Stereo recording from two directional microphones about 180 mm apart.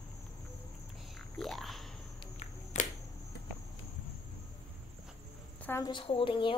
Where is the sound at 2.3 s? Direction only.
40° left (ahead or behind).